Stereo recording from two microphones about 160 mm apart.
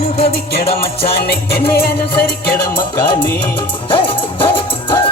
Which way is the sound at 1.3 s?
80° left.